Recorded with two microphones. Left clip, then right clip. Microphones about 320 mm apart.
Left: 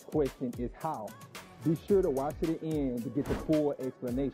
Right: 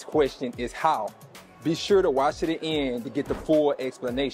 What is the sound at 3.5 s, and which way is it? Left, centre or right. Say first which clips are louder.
Speech: right 8 dB; right.